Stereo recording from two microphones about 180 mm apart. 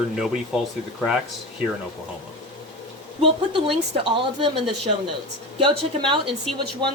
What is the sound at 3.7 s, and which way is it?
A woman's voice, 30° right (ahead or behind).